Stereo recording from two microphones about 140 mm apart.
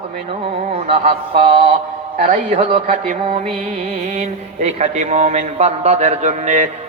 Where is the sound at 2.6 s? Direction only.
45° right (ahead or behind).